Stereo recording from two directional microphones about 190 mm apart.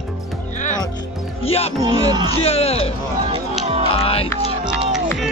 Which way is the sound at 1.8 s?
25° right (ahead or behind).